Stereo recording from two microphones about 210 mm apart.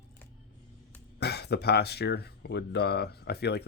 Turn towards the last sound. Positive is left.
turn(degrees=50)  # may be behind; listen again after turning